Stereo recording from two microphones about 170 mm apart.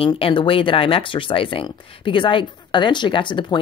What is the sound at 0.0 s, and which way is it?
Speech, 30° left (ahead or behind).